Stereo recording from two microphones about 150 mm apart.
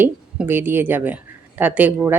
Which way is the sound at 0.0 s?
15° right (ahead or behind).